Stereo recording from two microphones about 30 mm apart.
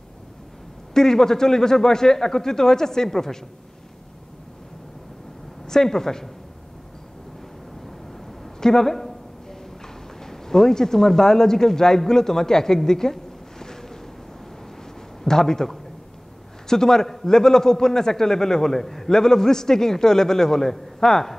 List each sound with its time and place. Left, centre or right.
0.9 s a man's voice: centre
5.7 s a man's voice: centre
8.5 s a sound: centre
10.2 s a man's voice: centre
15.2 s a man's voice: centre